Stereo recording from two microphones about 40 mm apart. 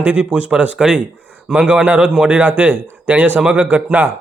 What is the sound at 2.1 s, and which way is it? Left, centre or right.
Speech, right.